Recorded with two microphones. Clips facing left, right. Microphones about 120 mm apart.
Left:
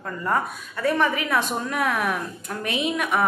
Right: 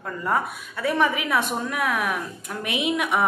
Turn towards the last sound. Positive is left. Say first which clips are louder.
# even
turn(degrees=-15)  # may be behind; listen again after turning